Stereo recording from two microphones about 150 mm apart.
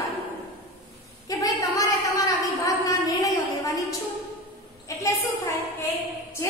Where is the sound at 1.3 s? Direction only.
20° left (ahead or behind).